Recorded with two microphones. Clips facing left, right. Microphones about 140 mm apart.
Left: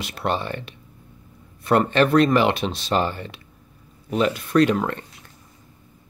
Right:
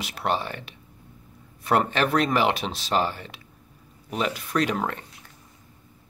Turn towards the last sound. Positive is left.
turn(degrees=-10)  # may be behind; listen again after turning